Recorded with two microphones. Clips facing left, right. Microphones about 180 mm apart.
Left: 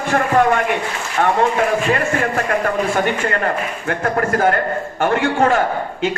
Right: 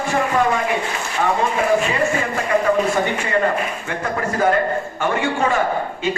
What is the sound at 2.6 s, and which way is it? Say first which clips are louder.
A man's voice: right 1 dB; 60° left (ahead or behind).